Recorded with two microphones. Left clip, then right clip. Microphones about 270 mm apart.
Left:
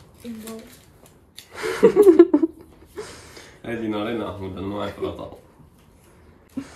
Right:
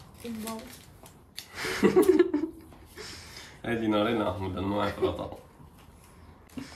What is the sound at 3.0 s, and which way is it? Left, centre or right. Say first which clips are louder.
Speech: left 6 dB; centre.